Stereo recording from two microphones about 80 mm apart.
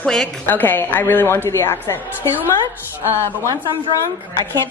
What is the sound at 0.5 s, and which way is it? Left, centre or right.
A woman's voice, left.